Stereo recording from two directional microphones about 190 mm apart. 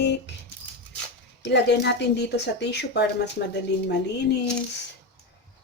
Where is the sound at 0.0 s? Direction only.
65° left (ahead or behind).